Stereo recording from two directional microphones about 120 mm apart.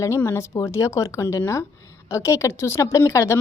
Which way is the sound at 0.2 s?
20° left (ahead or behind).